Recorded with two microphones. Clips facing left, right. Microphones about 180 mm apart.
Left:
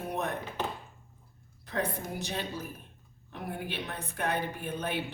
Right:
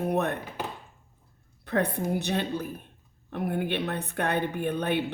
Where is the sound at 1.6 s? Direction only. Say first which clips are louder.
Right 7 dB; 65° right (ahead or behind).